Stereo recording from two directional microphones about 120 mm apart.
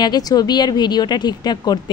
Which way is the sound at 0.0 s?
35° left (ahead or behind).